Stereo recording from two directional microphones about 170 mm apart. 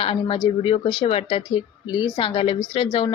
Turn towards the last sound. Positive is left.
turn(degrees=30)  # may be behind; listen again after turning